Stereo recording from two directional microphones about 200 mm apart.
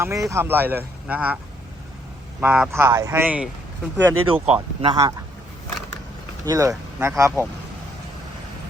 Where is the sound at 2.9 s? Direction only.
15° right (ahead or behind).